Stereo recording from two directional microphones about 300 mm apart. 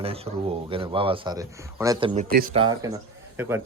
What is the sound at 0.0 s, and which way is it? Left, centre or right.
Speech, centre.